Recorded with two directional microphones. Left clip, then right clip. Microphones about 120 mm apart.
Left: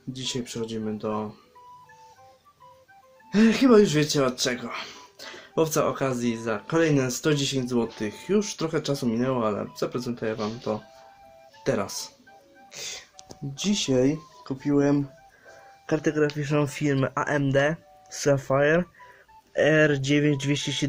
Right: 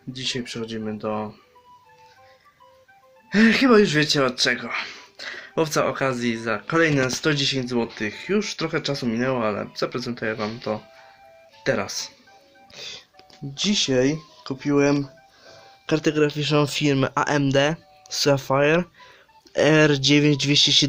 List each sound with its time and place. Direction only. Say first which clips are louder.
0.1 s speech: right 4 dB; centre (ahead or behind)
3.2 s speech: right 3 dB; 10° right (ahead or behind)
12.7 s music: even; centre (ahead or behind)
13.5 s speech: right 4 dB; 5° left (ahead or behind)
16.5 s speech: right 5 dB; 35° right (ahead or behind)
18.1 s speech: right 3 dB; 20° right (ahead or behind)
19.5 s speech: right 3 dB; 45° right (ahead or behind)